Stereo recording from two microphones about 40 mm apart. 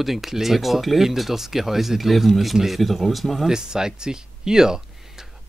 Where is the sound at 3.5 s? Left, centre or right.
Centre.